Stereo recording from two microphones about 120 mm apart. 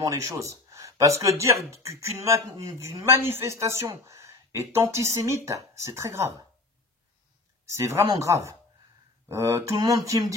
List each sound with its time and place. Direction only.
0.0 s speech: 30° right (ahead or behind)
7.7 s speech: 25° right (ahead or behind)